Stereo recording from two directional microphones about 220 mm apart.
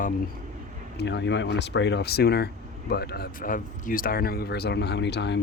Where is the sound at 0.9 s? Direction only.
50° left (ahead or behind).